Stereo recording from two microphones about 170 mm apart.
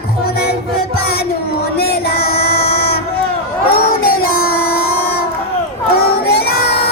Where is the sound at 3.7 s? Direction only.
60° left (ahead or behind).